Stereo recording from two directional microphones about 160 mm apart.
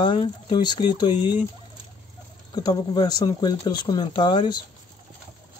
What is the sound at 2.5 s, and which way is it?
Speech, 25° left (ahead or behind).